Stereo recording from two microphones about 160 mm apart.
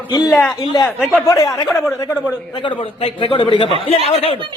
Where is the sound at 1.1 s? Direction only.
20° left (ahead or behind).